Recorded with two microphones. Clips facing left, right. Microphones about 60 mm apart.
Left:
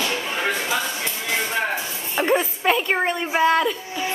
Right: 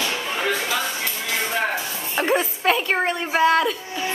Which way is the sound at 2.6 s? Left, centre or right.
Centre.